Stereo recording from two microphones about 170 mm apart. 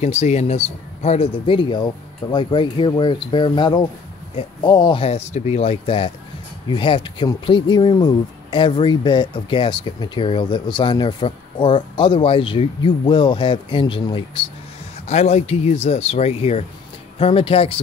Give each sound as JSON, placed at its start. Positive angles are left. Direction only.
{"t": 0.0, "sound": "speech", "side_deg": 40}